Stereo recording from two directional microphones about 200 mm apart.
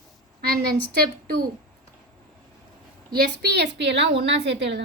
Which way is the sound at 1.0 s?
50° right (ahead or behind).